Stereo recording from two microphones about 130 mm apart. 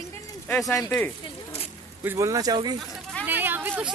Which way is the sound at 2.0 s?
25° right (ahead or behind).